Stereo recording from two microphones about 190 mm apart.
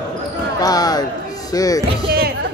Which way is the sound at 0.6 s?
20° left (ahead or behind).